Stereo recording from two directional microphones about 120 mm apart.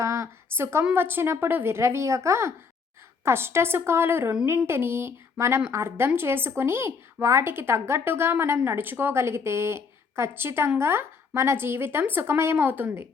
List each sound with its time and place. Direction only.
0.0 s a woman's voice: 25° right (ahead or behind)